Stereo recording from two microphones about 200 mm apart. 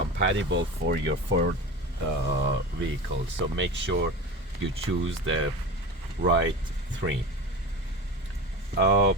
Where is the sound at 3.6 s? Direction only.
65° right (ahead or behind).